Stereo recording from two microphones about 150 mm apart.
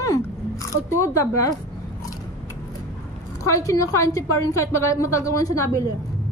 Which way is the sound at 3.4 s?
20° left (ahead or behind).